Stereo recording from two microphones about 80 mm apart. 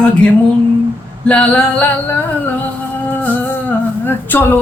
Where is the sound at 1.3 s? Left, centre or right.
Centre.